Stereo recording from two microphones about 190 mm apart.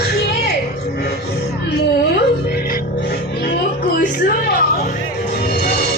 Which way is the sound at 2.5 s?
50° left (ahead or behind).